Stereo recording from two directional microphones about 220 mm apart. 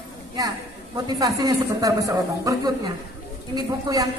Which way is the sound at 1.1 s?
15° right (ahead or behind).